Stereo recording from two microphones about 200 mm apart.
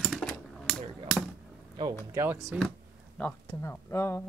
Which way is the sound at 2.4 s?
Centre (ahead or behind).